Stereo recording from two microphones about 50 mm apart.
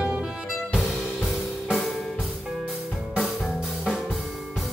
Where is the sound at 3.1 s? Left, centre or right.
Centre.